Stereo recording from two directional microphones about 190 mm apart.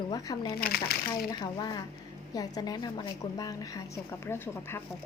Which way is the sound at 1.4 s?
20° left (ahead or behind).